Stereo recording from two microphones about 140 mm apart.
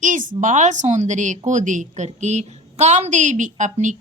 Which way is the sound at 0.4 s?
60° right (ahead or behind).